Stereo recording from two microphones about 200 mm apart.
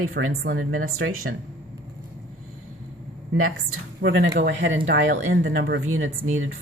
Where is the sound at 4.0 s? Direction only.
55° right (ahead or behind).